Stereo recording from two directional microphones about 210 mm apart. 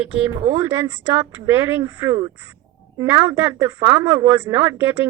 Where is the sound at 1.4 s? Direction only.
10° right (ahead or behind).